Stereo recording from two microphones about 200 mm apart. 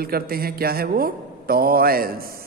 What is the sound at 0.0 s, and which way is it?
Speech, 50° right (ahead or behind).